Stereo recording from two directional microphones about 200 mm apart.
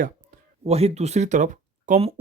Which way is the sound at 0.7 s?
30° right (ahead or behind).